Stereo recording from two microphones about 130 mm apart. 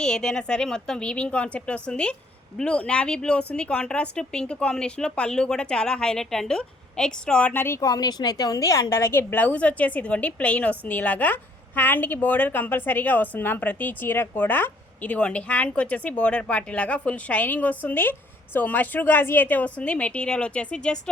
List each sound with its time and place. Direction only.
0.0 s speech: 5° left (ahead or behind)